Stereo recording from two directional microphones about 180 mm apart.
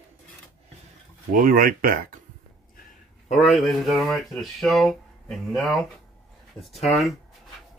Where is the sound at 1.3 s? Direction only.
50° right (ahead or behind).